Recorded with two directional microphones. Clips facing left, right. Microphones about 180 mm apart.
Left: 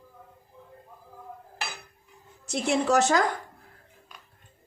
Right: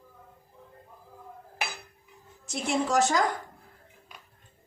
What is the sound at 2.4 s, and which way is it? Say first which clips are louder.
Speech: left 3 dB; 65° left (ahead or behind).